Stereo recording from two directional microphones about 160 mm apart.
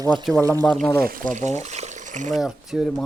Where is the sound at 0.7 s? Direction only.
5° left (ahead or behind).